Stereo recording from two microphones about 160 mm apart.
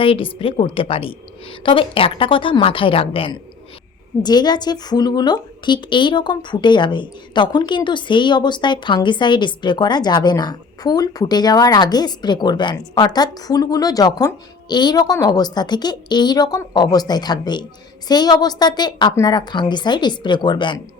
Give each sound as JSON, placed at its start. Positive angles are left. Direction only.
{"t": 0.0, "sound": "a woman's voice", "side_deg": 35}